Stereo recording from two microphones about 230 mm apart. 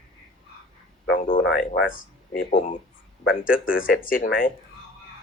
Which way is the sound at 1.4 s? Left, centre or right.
Left.